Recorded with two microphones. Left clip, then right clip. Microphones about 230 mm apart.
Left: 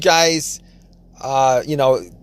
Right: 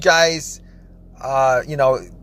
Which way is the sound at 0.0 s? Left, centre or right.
Left.